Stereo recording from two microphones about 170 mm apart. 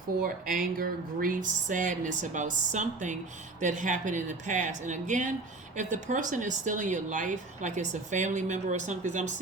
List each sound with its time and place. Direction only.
0.2 s speech: 55° right (ahead or behind)